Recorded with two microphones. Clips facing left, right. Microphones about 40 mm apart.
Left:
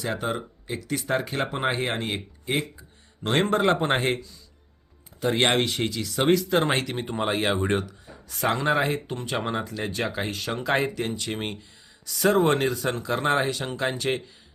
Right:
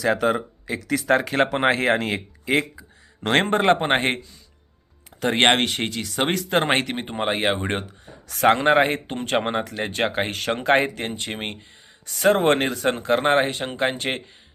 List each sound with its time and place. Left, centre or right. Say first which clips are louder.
0.0 s speech: right 8 dB; right
3.4 s speech: even; right
5.2 s speech: right 4 dB; right
8.3 s speech: right 7 dB; right